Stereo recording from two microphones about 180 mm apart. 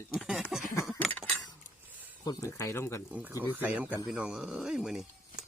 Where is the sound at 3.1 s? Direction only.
10° right (ahead or behind).